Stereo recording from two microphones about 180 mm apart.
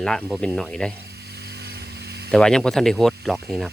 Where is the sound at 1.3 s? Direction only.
65° right (ahead or behind).